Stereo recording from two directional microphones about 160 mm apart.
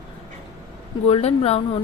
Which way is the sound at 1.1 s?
40° left (ahead or behind).